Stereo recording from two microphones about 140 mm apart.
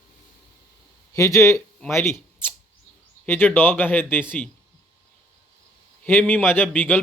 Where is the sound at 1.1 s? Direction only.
20° left (ahead or behind).